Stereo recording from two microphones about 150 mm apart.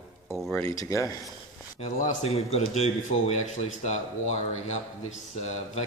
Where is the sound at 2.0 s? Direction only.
50° left (ahead or behind).